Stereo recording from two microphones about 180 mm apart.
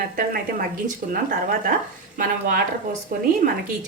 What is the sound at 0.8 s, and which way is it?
Speech, 55° right (ahead or behind).